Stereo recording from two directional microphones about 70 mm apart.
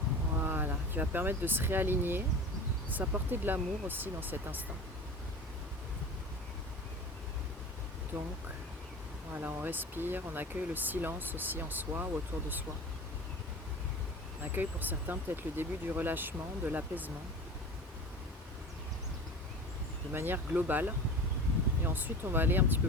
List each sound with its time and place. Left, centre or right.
0.3 s speech: right
9.3 s speech: right
14.4 s speech: right
20.1 s speech: right